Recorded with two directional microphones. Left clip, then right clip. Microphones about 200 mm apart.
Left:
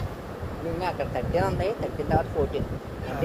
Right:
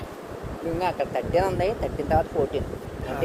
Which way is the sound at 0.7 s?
55° right (ahead or behind).